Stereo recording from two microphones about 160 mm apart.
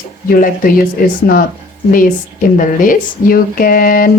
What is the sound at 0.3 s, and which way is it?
Speech, 60° left (ahead or behind).